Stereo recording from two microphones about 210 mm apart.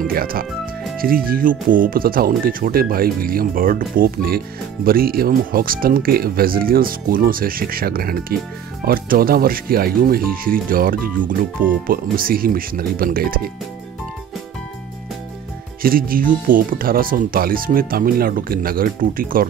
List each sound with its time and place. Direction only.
0.0 s speech: 45° right (ahead or behind)
15.8 s speech: 45° right (ahead or behind)